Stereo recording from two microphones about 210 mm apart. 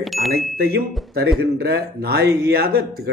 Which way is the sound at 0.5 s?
50° right (ahead or behind).